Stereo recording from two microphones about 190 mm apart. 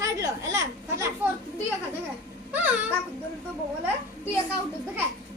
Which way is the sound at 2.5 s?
10° right (ahead or behind).